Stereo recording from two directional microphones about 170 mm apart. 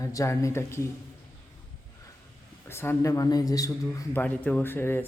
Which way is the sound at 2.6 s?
15° left (ahead or behind).